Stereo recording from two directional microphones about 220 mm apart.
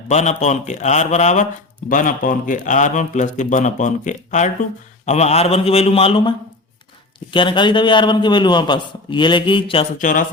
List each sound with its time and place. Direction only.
0.1 s a man's voice: 30° left (ahead or behind)
10.0 s speech: 35° left (ahead or behind)